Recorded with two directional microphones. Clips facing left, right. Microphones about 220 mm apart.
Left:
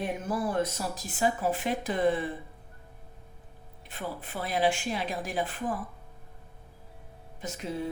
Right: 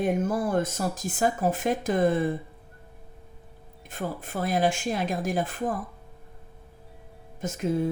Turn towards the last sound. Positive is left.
turn(degrees=-45)  # may be behind; listen again after turning